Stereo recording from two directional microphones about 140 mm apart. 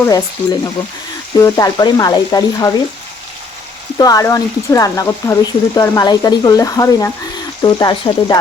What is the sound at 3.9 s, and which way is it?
Speech, 25° left (ahead or behind).